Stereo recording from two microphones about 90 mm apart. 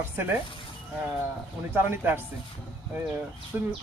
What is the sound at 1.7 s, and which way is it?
Speech, 25° right (ahead or behind).